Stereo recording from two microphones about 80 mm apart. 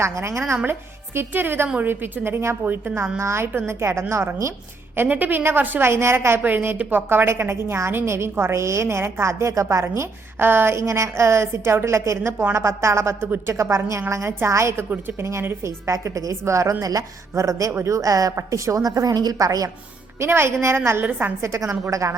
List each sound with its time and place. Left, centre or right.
0.0 s a woman's voice: right
4.9 s a woman's voice: right
20.1 s a woman's voice: right
21.4 s a woman's voice: right